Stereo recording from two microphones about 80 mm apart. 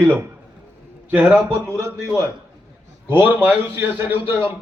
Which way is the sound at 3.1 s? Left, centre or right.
Right.